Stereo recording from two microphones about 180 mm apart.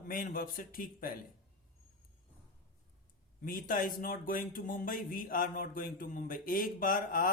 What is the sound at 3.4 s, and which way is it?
Speech, 50° left (ahead or behind).